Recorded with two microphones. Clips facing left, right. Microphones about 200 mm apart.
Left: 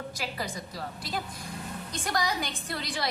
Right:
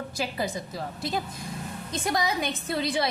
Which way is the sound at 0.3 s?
25° right (ahead or behind).